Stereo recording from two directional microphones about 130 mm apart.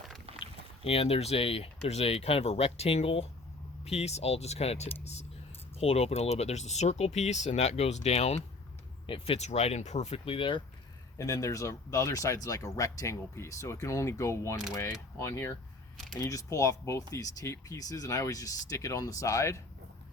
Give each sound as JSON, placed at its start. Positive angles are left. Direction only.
{"t": 0.3, "sound": "boat", "side_deg": -50}
{"t": 0.9, "sound": "speech", "side_deg": 50}
{"t": 9.0, "sound": "speech", "side_deg": 45}
{"t": 11.2, "sound": "speech", "side_deg": 25}